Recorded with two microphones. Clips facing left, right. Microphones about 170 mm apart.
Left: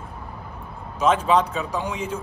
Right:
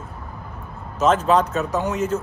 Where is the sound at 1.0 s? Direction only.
10° left (ahead or behind).